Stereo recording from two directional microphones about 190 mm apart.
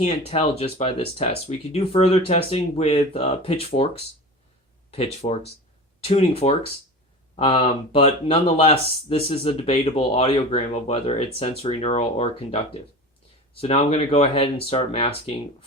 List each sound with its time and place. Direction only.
0.0 s speech: 30° left (ahead or behind)
13.6 s speech: 30° left (ahead or behind)